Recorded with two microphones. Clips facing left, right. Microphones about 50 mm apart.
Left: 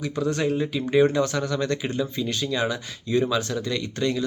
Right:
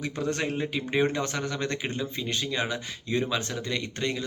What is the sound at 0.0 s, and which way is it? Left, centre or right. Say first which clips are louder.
Speech: left 5 dB; right.